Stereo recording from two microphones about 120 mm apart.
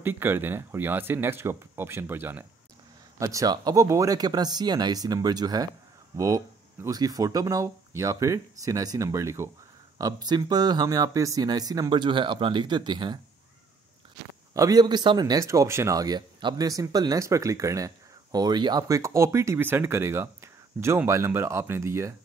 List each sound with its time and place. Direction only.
0.0 s speech: 15° right (ahead or behind)
3.2 s speech: 30° right (ahead or behind)
14.5 s speech: 30° right (ahead or behind)
15.4 s speech: 25° right (ahead or behind)